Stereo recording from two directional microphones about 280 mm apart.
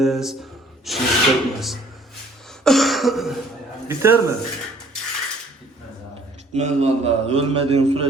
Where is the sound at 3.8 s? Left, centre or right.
Centre.